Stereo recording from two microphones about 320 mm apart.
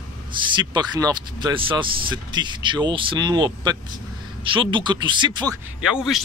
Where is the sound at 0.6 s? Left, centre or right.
Centre.